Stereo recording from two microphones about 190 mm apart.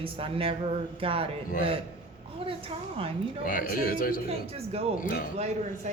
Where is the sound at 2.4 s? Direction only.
25° right (ahead or behind).